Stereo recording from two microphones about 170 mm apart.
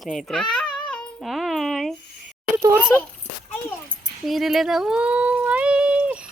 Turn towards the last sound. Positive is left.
turn(degrees=-10)  # may be behind; listen again after turning